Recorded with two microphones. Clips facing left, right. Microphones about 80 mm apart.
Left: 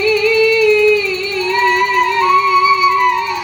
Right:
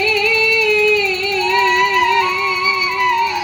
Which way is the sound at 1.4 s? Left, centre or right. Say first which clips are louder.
Left 1 dB; left.